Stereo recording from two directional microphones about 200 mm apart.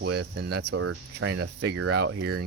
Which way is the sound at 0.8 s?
90° right.